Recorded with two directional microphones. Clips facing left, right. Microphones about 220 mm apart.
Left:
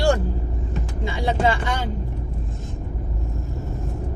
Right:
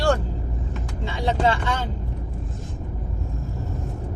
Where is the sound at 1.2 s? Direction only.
10° left (ahead or behind).